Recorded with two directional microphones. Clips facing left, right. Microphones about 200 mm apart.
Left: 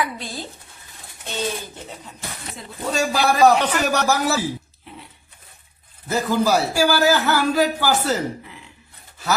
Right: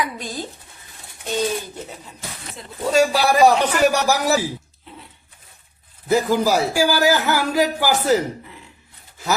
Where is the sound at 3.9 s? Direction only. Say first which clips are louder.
Right 1 dB; 15° right (ahead or behind).